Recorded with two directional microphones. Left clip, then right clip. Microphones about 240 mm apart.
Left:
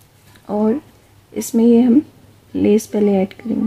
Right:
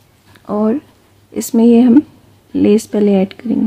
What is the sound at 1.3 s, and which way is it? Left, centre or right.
Speech, centre.